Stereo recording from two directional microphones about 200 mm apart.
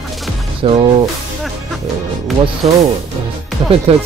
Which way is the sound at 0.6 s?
25° right (ahead or behind).